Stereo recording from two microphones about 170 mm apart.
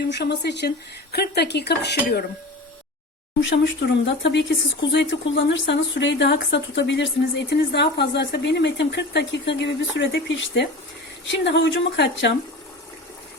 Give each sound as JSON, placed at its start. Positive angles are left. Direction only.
{"t": 0.1, "sound": "speech", "side_deg": 85}
{"t": 3.4, "sound": "speech", "side_deg": 90}